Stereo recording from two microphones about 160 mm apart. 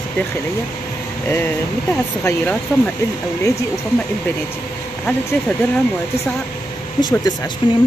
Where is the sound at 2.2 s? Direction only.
20° left (ahead or behind).